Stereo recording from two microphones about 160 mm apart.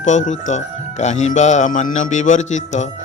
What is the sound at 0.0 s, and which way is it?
Speech, 45° left (ahead or behind).